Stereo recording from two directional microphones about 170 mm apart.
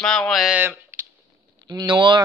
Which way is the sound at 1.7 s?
25° right (ahead or behind).